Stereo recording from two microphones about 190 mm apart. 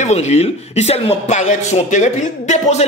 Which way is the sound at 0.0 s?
35° left (ahead or behind).